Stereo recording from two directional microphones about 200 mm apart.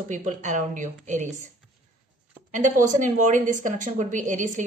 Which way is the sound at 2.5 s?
40° right (ahead or behind).